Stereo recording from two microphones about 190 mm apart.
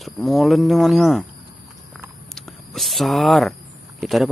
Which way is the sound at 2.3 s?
Centre (ahead or behind).